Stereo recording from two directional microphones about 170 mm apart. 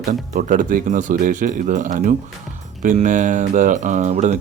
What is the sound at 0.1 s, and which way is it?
Speech, 50° right (ahead or behind).